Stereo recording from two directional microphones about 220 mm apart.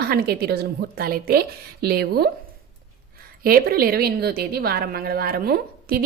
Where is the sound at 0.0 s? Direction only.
45° right (ahead or behind).